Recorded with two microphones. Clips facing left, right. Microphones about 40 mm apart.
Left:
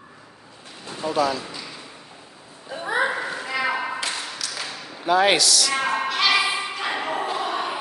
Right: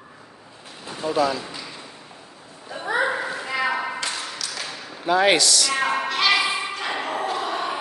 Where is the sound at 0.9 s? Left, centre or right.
Centre.